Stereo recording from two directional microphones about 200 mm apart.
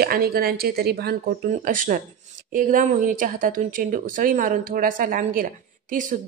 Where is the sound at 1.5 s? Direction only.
40° right (ahead or behind).